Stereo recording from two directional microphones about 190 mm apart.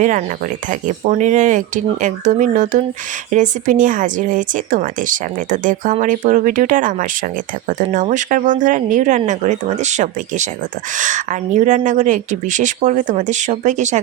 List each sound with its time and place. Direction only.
0.0 s speech: 40° right (ahead or behind)